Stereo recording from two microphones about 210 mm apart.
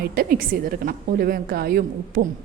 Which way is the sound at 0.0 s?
45° right (ahead or behind).